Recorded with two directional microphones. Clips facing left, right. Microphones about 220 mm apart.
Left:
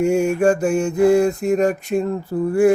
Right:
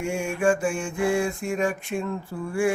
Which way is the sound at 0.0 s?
40° left (ahead or behind).